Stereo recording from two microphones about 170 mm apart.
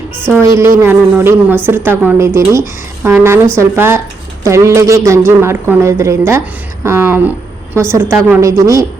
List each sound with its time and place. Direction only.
0.3 s a woman's voice: 15° right (ahead or behind)